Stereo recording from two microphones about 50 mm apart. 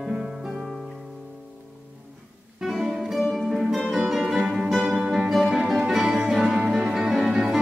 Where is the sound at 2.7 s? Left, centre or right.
Centre.